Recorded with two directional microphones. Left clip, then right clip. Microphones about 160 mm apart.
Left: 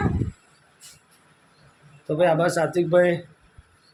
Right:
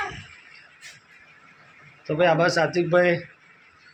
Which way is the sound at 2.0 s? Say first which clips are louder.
Even; 15° left (ahead or behind).